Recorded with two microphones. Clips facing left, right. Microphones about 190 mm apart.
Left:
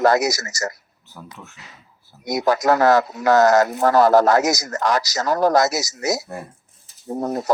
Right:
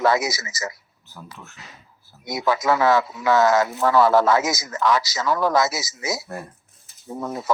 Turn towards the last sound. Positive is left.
turn(degrees=40)  # may be behind; listen again after turning